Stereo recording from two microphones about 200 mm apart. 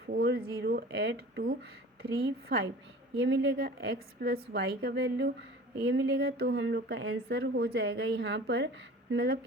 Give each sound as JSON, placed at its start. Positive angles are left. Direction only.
{"t": 0.1, "sound": "a woman's voice", "side_deg": -50}
{"t": 7.0, "sound": "a woman's voice", "side_deg": -75}